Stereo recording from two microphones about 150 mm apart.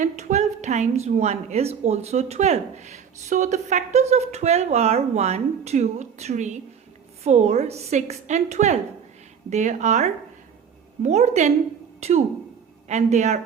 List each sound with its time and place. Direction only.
0.0 s a woman's voice: 50° right (ahead or behind)